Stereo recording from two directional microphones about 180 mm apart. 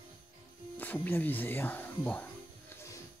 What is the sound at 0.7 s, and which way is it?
Speech, 10° left (ahead or behind).